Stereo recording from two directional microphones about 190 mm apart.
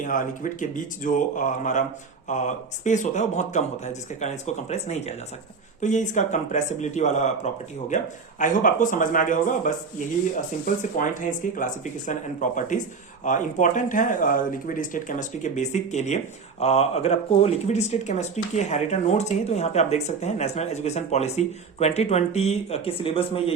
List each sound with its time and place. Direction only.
0.0 s speech: 45° left (ahead or behind)
10.9 s speech: 45° left (ahead or behind)